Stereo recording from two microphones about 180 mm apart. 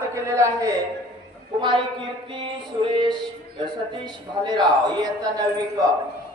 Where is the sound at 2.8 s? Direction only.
30° right (ahead or behind).